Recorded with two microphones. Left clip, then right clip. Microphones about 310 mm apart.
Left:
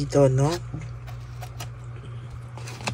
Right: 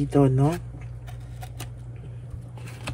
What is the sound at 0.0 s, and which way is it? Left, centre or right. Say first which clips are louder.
Speech: left 2 dB; centre.